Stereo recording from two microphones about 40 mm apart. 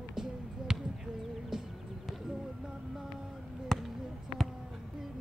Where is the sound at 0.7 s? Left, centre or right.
Centre.